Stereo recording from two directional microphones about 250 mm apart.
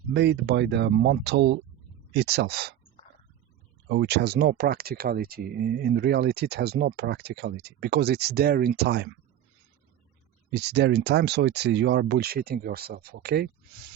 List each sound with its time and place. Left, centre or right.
0.1 s speech: right
3.8 s speech: right
10.5 s speech: right